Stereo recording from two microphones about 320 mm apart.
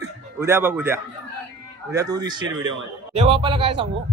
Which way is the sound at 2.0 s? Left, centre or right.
Centre.